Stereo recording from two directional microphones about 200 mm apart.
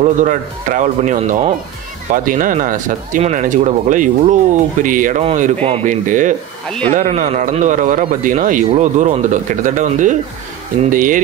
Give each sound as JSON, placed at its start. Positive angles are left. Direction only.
{"t": 0.0, "sound": "speech", "side_deg": -40}